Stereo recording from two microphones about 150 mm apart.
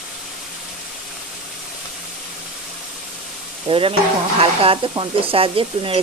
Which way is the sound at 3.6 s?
35° right (ahead or behind).